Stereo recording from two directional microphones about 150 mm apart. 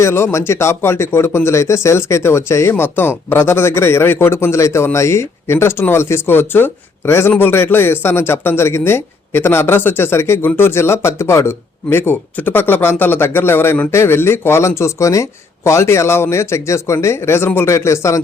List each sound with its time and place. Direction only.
0.0 s speech: 15° left (ahead or behind)